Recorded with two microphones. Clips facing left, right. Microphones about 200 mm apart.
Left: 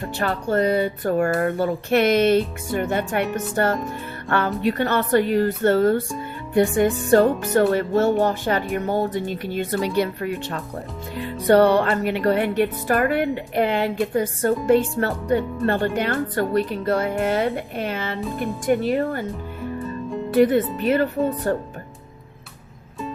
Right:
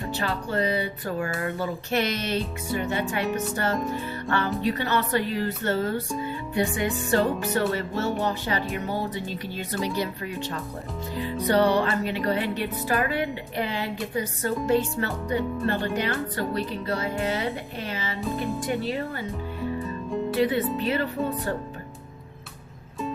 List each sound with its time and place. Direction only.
0.2 s music: 50° left (ahead or behind)
19.8 s music: centre (ahead or behind)
20.3 s speech: 50° left (ahead or behind)
20.8 s music: 50° left (ahead or behind)